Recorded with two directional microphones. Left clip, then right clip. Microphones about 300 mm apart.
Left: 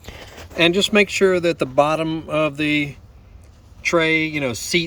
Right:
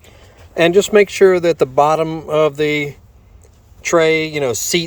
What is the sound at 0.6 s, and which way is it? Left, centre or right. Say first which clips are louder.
A woman's voice: right 5 dB; right.